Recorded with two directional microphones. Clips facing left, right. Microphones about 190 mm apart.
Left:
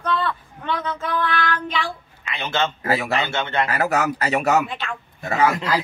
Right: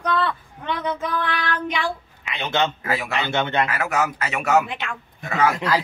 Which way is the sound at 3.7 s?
35° left (ahead or behind).